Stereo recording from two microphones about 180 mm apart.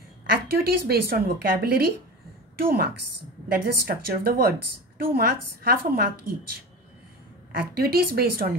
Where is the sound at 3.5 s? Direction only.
55° right (ahead or behind).